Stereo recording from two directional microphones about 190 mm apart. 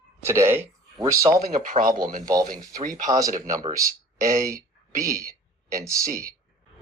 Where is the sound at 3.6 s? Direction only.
15° right (ahead or behind).